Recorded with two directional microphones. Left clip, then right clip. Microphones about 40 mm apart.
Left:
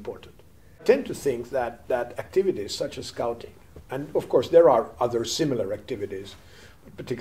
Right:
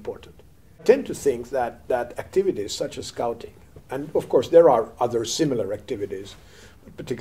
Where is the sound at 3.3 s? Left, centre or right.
Right.